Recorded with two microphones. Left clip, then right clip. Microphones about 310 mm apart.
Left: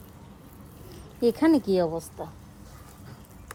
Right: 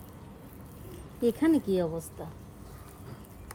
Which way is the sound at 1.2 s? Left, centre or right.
Left.